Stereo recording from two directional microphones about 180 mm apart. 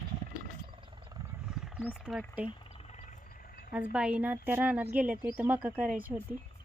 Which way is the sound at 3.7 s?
5° right (ahead or behind).